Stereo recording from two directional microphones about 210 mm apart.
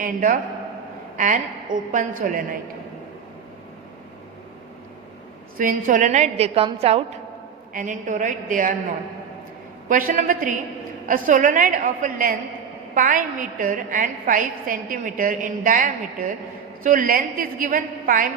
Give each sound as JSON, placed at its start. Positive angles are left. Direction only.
{"t": 0.0, "sound": "a woman's voice", "side_deg": -40}
{"t": 1.1, "sound": "a sound", "side_deg": -35}
{"t": 1.9, "sound": "a woman's voice", "side_deg": -40}
{"t": 5.5, "sound": "a woman's voice", "side_deg": -40}
{"t": 9.9, "sound": "a woman's voice", "side_deg": -40}